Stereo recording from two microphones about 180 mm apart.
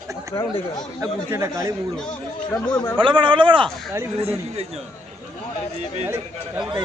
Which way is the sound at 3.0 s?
30° right (ahead or behind).